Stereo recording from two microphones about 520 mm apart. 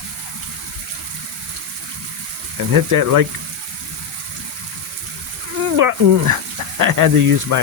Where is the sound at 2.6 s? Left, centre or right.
Right.